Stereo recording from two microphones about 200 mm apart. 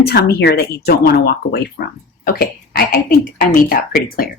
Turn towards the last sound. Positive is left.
turn(degrees=45)  # may be behind; listen again after turning